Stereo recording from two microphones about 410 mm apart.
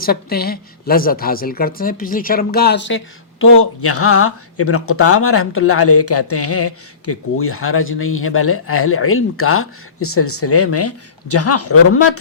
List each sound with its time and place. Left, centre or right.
0.0 s a woman's voice: left